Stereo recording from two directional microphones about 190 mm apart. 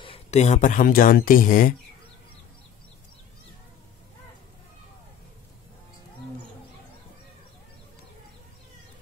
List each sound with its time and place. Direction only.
0.0 s speech: 35° left (ahead or behind)